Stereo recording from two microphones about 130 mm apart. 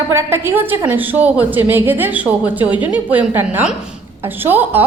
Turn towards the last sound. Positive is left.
turn(degrees=-15)  # may be behind; listen again after turning